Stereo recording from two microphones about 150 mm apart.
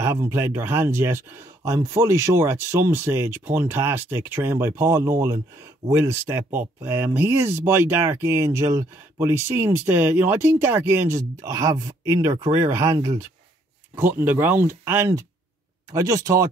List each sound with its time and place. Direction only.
0.0 s speech: 15° right (ahead or behind)